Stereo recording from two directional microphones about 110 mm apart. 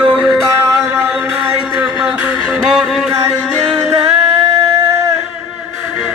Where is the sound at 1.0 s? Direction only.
10° right (ahead or behind).